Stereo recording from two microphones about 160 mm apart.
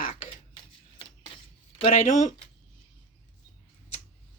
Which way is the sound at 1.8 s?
50° left (ahead or behind).